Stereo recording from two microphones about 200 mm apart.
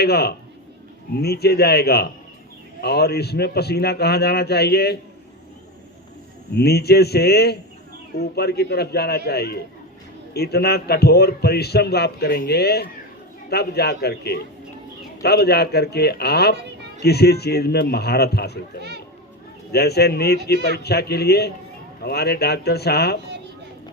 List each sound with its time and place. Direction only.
0.0 s a man's voice: 55° left (ahead or behind)
6.6 s a man's voice: 55° left (ahead or behind)
19.7 s a man's voice: 55° left (ahead or behind)